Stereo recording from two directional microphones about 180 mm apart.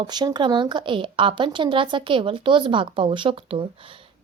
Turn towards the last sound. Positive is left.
turn(degrees=-30)  # may be behind; listen again after turning